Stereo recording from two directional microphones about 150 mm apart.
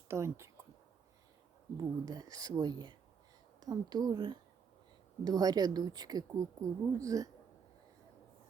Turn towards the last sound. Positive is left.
turn(degrees=-20)  # may be behind; listen again after turning